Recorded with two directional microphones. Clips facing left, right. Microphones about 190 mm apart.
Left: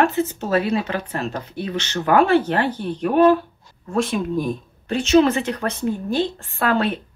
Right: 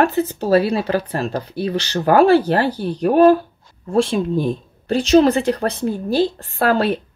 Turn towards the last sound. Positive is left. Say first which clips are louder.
# right 3 dB
turn(degrees=-35)  # may be behind; listen again after turning